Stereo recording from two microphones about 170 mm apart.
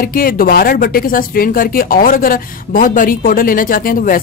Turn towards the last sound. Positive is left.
turn(degrees=55)  # may be behind; listen again after turning